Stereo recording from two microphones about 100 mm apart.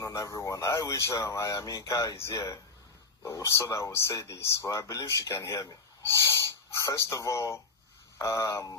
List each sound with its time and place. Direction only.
0.0 s speech: 30° left (ahead or behind)